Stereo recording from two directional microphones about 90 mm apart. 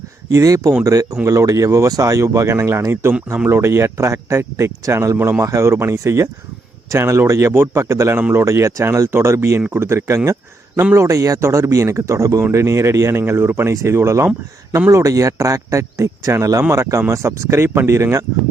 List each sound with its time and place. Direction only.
0.3 s speech: 35° right (ahead or behind)